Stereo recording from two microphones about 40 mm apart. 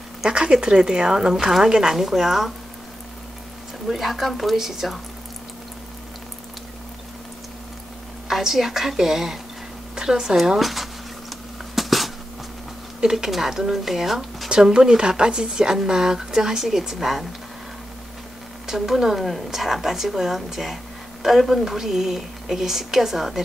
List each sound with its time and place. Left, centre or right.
0.3 s a woman's voice: centre
3.8 s a woman's voice: centre
8.3 s a woman's voice: centre
10.6 s a sound: centre
13.1 s a woman's voice: centre
14.7 s a woman's voice: centre
18.7 s a woman's voice: centre